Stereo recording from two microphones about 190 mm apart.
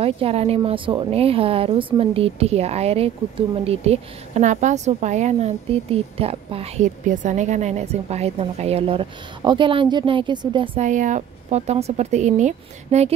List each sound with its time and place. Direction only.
0.0 s speech: 30° right (ahead or behind)
10.8 s speech: 40° right (ahead or behind)